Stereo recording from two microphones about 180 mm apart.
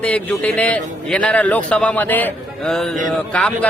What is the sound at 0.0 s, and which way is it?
A man's voice, 5° left (ahead or behind).